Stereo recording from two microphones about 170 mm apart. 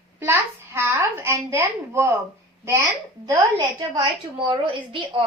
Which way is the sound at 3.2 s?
20° right (ahead or behind).